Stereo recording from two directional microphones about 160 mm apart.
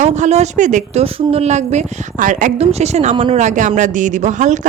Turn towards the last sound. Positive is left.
turn(degrees=-50)  # may be behind; listen again after turning